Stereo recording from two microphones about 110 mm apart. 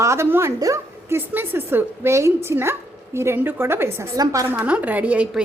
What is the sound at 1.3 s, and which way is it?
A woman's voice, 20° right (ahead or behind).